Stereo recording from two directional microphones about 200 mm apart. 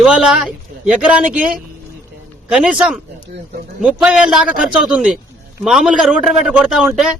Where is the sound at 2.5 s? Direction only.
5° right (ahead or behind).